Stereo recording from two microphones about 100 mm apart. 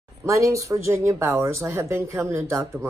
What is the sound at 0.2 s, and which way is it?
Speech, 30° right (ahead or behind).